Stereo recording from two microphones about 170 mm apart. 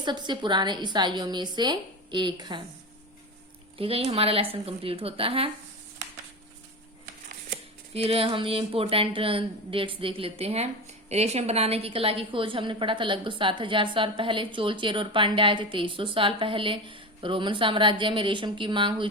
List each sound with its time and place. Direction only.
0.0 s a woman's voice: 25° right (ahead or behind)
3.8 s a woman's voice: 35° right (ahead or behind)
7.9 s a woman's voice: 35° right (ahead or behind)